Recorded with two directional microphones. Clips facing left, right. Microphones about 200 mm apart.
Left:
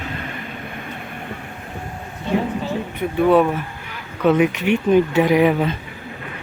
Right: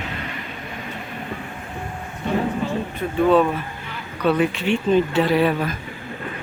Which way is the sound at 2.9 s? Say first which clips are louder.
Left 2 dB; 15° left (ahead or behind).